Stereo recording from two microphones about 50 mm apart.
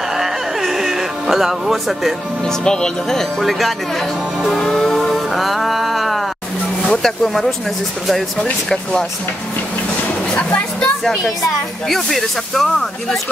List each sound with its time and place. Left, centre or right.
0.2 s music: centre
2.4 s speech: centre
4.5 s music: centre
6.9 s speech: centre
10.3 s speech: left
11.9 s speech: centre